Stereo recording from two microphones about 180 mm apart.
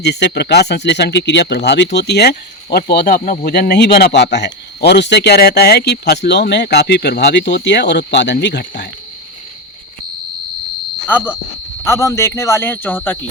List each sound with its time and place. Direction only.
0.0 s speech: 65° left (ahead or behind)
11.9 s speech: 15° left (ahead or behind)